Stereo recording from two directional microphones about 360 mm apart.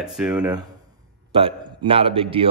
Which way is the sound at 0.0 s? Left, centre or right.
Centre.